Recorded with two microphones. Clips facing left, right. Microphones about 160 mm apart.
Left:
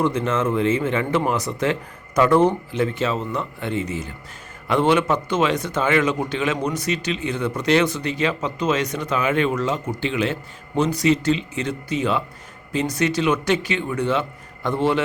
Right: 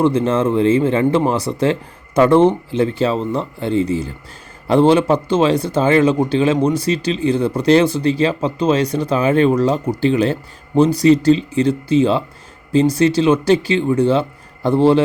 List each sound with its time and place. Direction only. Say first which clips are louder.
0.0 s a man's voice: right 6 dB; 30° right (ahead or behind)